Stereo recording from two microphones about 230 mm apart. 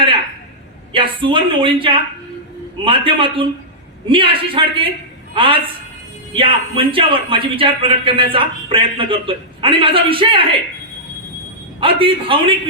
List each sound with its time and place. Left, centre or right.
0.9 s a man's voice: right
11.8 s a man's voice: right